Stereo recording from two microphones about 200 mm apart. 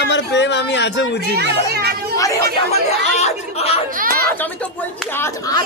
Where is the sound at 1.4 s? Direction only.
55° right (ahead or behind).